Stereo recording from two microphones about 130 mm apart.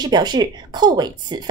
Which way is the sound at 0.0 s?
35° right (ahead or behind).